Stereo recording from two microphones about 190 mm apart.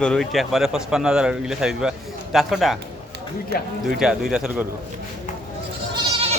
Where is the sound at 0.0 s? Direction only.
5° left (ahead or behind).